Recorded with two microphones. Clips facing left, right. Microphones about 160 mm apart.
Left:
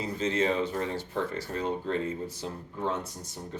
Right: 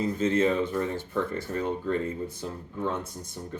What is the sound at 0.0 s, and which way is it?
Speech, 50° right (ahead or behind).